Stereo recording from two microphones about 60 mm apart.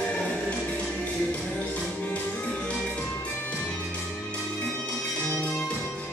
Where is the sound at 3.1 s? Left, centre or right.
Left.